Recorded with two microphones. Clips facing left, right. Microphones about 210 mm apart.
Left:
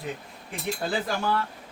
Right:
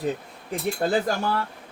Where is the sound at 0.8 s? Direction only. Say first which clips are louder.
Right 6 dB; 45° right (ahead or behind).